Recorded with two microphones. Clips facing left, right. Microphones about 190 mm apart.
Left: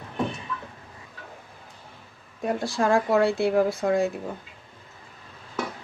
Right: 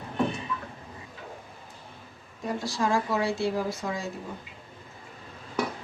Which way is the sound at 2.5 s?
60° left (ahead or behind).